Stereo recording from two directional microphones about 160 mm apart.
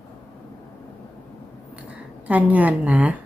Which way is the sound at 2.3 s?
10° right (ahead or behind).